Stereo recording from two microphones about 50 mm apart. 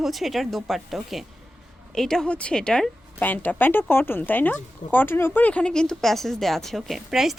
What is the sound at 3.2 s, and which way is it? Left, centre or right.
Speech, left.